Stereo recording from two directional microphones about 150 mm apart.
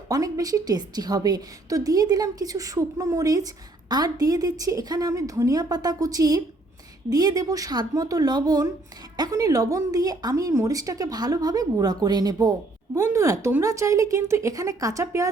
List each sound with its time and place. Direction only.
0.1 s a woman's voice: 25° right (ahead or behind)